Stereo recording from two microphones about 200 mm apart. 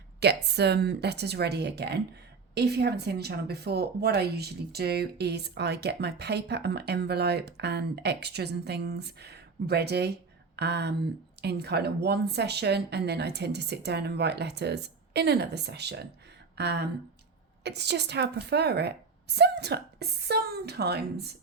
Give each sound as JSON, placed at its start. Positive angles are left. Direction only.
{"t": 0.2, "sound": "speech", "side_deg": -55}